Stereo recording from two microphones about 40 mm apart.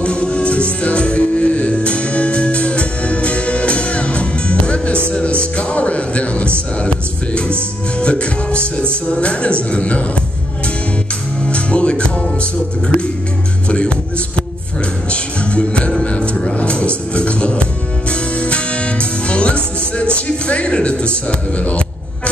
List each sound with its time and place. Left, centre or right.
0.0 s music: left
8.0 s music: left
9.1 s a man's voice: left
11.4 s music: left
15.0 s music: left